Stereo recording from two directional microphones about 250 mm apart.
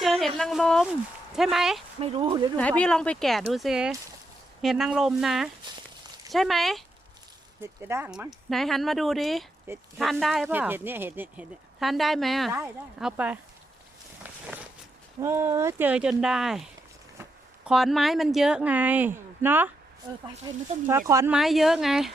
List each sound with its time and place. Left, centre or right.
0.0 s a woman's voice: centre
2.0 s speech: right
2.6 s speech: centre
7.6 s speech: centre
15.2 s speech: centre
17.7 s speech: centre
21.3 s speech: centre